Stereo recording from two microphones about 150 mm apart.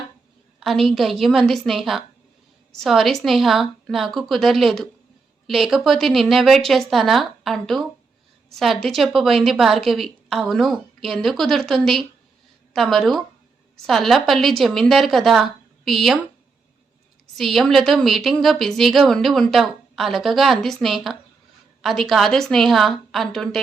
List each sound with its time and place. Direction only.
0.6 s a woman's voice: centre (ahead or behind)
17.3 s a woman's voice: centre (ahead or behind)